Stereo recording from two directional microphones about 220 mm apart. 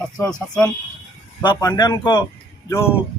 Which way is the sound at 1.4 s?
20° left (ahead or behind).